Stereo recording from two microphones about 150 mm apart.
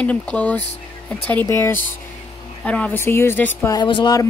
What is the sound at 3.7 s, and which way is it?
Speech, 30° left (ahead or behind).